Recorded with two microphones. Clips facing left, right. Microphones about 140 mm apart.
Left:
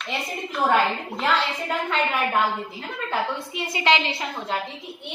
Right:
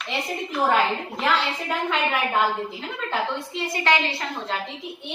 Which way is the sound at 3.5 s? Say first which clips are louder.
Left 1 dB; 20° left (ahead or behind).